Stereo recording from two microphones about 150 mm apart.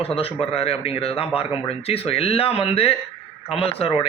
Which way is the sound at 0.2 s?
40° left (ahead or behind).